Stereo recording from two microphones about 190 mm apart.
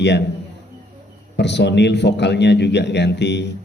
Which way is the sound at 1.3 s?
65° left (ahead or behind).